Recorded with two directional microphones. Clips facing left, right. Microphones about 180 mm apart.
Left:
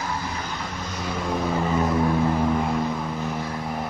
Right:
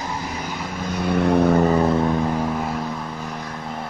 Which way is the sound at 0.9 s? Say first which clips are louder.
Right 10 dB; 60° right (ahead or behind).